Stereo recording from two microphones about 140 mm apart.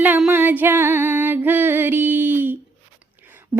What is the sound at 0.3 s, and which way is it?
Music, 15° right (ahead or behind).